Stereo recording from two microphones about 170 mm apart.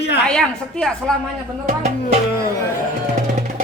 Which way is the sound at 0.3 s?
5° left (ahead or behind).